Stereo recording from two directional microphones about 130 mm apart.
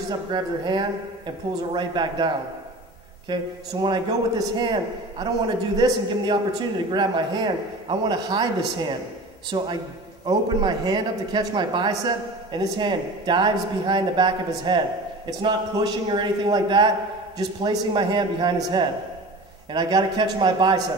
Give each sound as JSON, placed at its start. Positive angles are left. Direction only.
{"t": 0.3, "sound": "speech", "side_deg": -35}
{"t": 5.8, "sound": "speech", "side_deg": -35}